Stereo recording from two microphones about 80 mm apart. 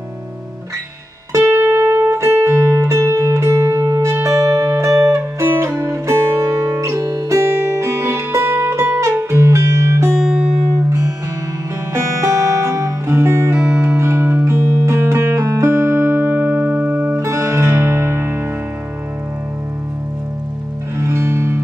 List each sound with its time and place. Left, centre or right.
1.4 s music: right
11.9 s music: right
21.0 s music: right